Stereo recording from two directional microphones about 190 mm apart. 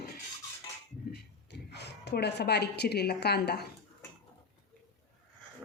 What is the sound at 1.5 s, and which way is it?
A woman's voice, 65° left (ahead or behind).